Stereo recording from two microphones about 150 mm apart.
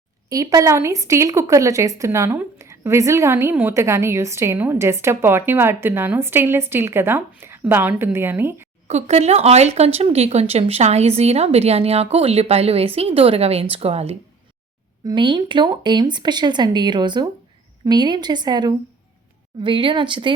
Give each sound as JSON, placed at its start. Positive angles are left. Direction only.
{"t": 0.3, "sound": "speech", "side_deg": -25}
{"t": 8.9, "sound": "speech", "side_deg": -45}
{"t": 15.0, "sound": "speech", "side_deg": -30}